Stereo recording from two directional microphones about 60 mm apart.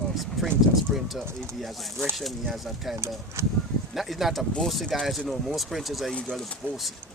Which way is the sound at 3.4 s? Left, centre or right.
Right.